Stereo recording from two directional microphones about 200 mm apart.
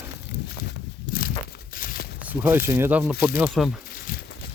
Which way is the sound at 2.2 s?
10° right (ahead or behind).